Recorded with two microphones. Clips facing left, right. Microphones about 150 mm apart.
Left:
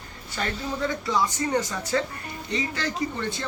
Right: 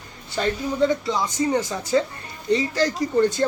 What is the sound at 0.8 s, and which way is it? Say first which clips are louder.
Speech: right 3 dB; 25° right (ahead or behind).